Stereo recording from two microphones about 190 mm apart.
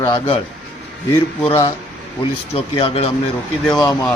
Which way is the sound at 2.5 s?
30° left (ahead or behind).